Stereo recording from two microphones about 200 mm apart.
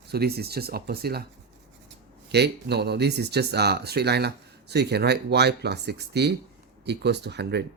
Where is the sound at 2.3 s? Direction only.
55° right (ahead or behind).